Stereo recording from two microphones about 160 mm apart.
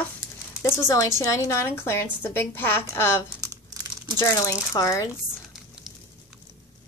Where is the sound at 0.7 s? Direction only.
20° left (ahead or behind).